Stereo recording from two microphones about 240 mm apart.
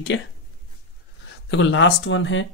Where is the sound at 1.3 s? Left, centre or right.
Left.